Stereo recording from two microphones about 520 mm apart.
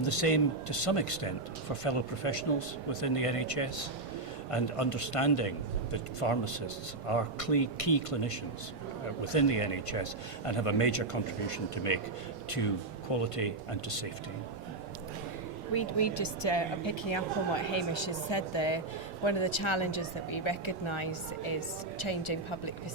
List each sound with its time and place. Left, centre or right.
0.0 s speech: left
5.9 s speech: left
13.1 s speech: left
15.7 s speech: left